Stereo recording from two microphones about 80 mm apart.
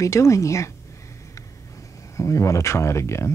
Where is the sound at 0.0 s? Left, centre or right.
Left.